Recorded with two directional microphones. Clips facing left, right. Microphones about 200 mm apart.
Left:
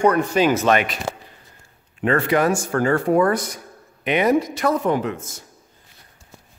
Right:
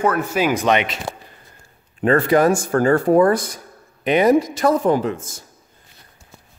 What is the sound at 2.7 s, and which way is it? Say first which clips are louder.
Speech: right 3 dB; 35° right (ahead or behind).